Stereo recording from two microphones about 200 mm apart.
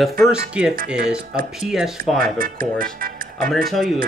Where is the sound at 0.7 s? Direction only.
45° right (ahead or behind).